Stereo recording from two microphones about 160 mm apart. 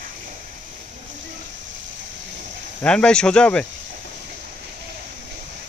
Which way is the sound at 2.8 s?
5° left (ahead or behind).